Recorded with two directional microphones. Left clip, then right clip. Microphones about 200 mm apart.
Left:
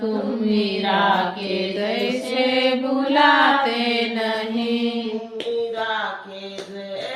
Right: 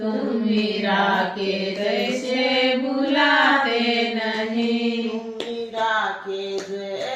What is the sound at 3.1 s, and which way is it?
Mantra, 40° left (ahead or behind).